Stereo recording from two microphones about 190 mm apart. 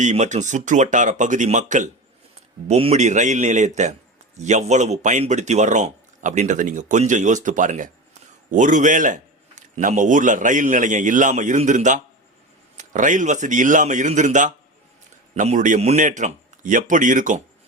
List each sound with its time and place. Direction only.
0.0 s a man's voice: 40° right (ahead or behind)